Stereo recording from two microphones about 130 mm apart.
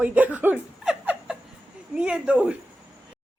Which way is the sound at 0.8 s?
5° right (ahead or behind).